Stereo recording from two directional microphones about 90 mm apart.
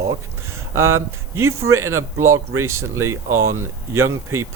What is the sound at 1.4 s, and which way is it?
Speech, 30° right (ahead or behind).